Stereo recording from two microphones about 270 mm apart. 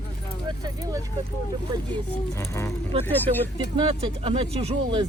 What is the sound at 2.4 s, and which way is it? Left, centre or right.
Speech, centre.